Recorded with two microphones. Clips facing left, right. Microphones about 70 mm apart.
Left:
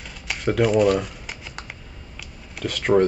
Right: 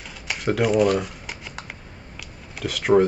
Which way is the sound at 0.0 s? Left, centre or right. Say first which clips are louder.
Left 1 dB; centre.